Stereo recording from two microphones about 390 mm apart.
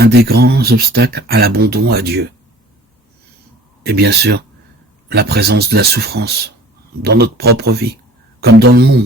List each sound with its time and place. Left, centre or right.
0.0 s speech: right
3.8 s speech: right